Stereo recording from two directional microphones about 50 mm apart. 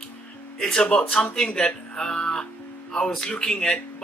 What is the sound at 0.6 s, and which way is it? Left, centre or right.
Speech, centre.